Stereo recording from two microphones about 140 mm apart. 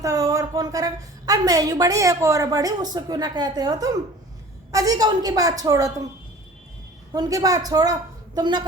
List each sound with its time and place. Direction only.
0.0 s a woman's voice: 25° right (ahead or behind)
7.1 s a woman's voice: 25° right (ahead or behind)